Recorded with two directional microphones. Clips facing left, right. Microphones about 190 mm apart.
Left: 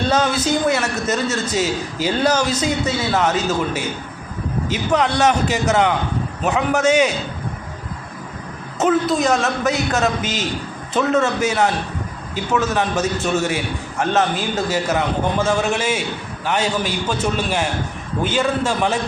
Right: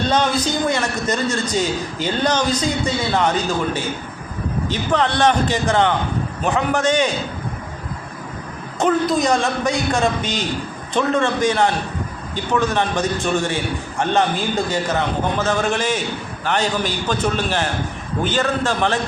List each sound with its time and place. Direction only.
0.1 s a man's voice: 5° left (ahead or behind)
8.8 s a man's voice: centre (ahead or behind)